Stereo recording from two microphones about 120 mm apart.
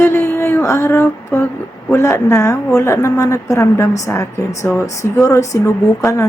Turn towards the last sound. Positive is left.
turn(degrees=25)  # may be behind; listen again after turning